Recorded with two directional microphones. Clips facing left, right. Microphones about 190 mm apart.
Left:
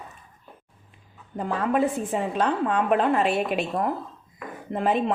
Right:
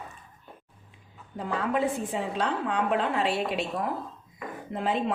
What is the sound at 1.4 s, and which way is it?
A woman's voice, 50° left (ahead or behind).